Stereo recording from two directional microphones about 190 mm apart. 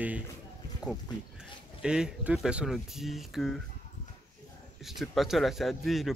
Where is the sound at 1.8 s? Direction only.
5° right (ahead or behind).